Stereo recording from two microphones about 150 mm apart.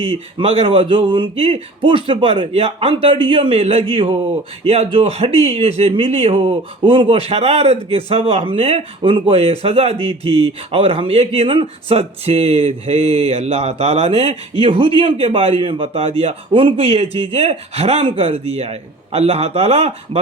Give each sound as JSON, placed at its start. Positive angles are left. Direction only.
{"t": 0.0, "sound": "speech", "side_deg": -40}